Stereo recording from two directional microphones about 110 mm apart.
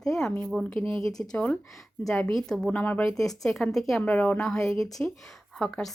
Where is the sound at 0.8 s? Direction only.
50° right (ahead or behind).